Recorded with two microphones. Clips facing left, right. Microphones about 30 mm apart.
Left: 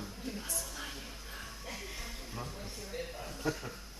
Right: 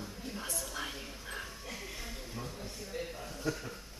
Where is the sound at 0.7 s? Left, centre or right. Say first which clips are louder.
Right 3 dB; centre.